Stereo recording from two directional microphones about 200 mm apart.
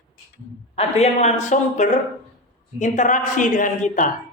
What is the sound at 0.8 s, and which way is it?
A woman's voice, 35° left (ahead or behind).